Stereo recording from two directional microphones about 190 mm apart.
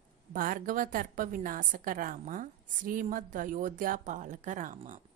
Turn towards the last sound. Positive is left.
turn(degrees=-40)  # may be behind; listen again after turning